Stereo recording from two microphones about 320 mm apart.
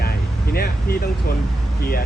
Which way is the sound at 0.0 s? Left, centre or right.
Left.